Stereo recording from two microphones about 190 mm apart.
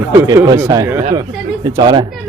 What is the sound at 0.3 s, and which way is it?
Speech, 15° right (ahead or behind).